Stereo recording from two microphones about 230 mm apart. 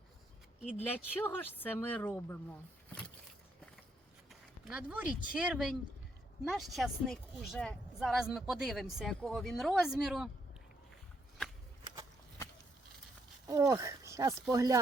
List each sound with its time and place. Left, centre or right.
0.8 s speech: centre
4.3 s speech: centre
13.5 s speech: centre